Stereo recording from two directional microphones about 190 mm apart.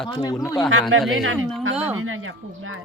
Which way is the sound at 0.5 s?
Centre (ahead or behind).